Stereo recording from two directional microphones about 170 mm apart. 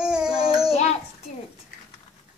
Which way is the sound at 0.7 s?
40° left (ahead or behind).